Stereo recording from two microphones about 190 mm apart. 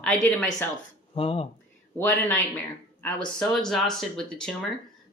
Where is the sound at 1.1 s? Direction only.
30° left (ahead or behind).